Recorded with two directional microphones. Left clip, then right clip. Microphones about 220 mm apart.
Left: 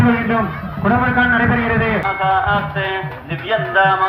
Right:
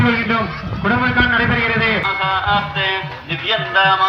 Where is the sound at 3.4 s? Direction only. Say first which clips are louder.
Even; 50° right (ahead or behind).